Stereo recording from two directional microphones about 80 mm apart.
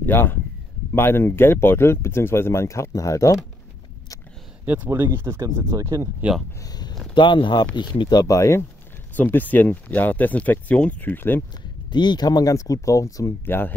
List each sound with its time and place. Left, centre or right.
0.0 s speech: left
4.6 s speech: right
5.8 s speech: right
6.6 s a sound: left
7.2 s speech: left
8.2 s speech: left
9.1 s speech: left
11.9 s speech: left
12.5 s speech: left
13.5 s speech: left